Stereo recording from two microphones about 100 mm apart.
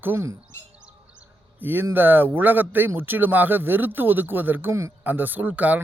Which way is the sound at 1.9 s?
20° right (ahead or behind).